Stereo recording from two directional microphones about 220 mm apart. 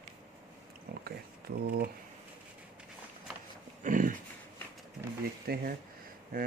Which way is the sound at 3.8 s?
35° right (ahead or behind).